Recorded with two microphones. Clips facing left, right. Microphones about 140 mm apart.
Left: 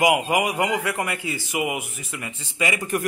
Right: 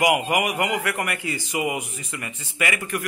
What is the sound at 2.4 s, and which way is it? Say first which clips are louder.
Speech: left 1 dB; 20° left (ahead or behind).